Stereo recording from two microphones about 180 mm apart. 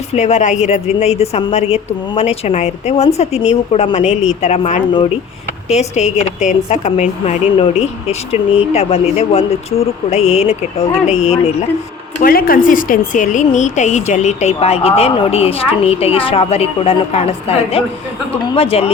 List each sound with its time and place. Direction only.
0.1 s a woman's voice: 40° left (ahead or behind)
12.2 s a woman's voice: 55° left (ahead or behind); by 18.9 s 30° left (ahead or behind)